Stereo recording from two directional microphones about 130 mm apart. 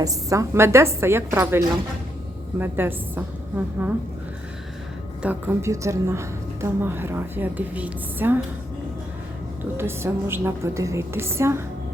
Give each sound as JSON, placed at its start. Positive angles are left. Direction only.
{"t": 0.0, "sound": "a woman's voice", "side_deg": -25}
{"t": 5.2, "sound": "a woman's voice", "side_deg": -15}
{"t": 9.7, "sound": "a woman's voice", "side_deg": -20}